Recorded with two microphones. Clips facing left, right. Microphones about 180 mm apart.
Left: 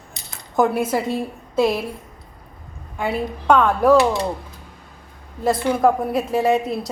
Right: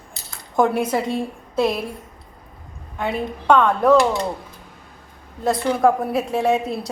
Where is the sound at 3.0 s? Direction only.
5° left (ahead or behind).